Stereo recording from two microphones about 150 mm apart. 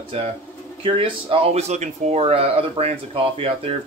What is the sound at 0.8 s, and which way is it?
Speech, 40° right (ahead or behind).